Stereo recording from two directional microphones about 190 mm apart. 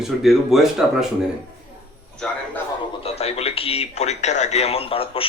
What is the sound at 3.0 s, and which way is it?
Speech, 35° left (ahead or behind).